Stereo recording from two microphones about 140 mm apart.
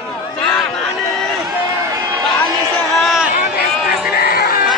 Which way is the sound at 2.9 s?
Centre (ahead or behind).